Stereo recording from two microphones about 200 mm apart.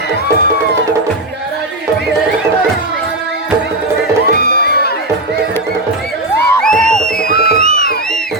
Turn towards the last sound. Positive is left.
turn(degrees=-35)  # may be behind; listen again after turning